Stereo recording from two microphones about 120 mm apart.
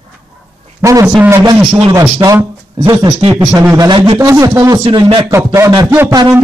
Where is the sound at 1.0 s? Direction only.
15° right (ahead or behind).